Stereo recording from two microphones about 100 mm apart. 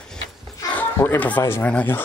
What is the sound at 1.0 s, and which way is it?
Speech, 15° left (ahead or behind).